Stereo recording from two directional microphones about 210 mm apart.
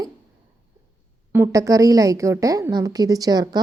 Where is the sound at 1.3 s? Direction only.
15° right (ahead or behind).